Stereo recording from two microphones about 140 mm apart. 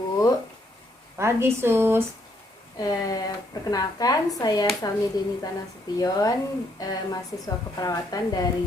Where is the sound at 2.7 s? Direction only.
30° left (ahead or behind).